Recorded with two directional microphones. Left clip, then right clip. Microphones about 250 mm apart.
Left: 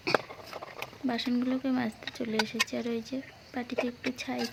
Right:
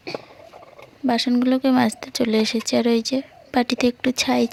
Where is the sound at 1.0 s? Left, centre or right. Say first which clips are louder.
Right 12 dB; right.